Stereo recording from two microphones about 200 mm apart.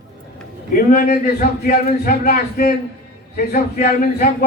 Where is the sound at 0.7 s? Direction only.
45° left (ahead or behind).